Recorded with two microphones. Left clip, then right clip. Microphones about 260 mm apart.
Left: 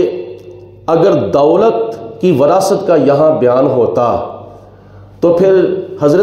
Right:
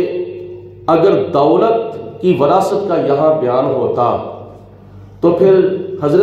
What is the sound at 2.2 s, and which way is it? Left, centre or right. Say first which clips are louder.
A man's voice: left 2 dB; left.